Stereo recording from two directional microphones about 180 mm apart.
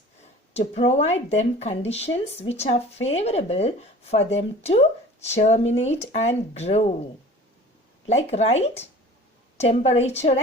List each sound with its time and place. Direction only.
0.5 s speech: 35° left (ahead or behind)
8.0 s speech: 35° left (ahead or behind)